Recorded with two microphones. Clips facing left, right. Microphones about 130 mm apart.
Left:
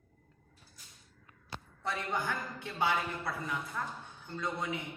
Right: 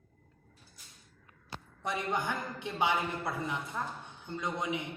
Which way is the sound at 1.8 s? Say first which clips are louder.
Right 2 dB; 15° right (ahead or behind).